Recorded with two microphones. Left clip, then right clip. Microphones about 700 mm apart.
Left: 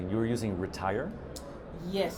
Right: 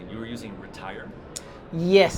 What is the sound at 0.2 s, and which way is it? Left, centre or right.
Speech, left.